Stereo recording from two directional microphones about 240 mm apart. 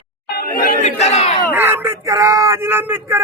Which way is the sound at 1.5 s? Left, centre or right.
Centre.